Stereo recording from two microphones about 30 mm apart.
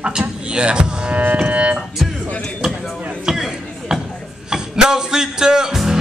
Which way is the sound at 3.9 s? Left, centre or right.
Centre.